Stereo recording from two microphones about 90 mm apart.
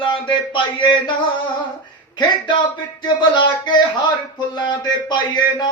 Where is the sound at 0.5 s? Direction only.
60° left (ahead or behind).